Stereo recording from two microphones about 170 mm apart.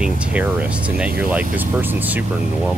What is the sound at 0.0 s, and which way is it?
Speech, 5° right (ahead or behind).